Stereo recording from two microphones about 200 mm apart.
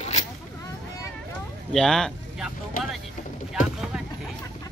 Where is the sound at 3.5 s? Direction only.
5° right (ahead or behind).